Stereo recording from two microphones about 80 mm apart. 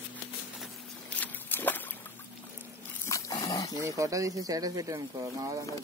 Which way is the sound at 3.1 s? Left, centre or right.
Left.